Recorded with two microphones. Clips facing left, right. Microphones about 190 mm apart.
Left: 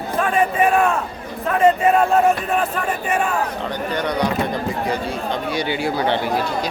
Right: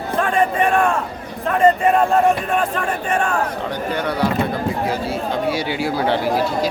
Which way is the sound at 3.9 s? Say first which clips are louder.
Right 1 dB; 10° right (ahead or behind).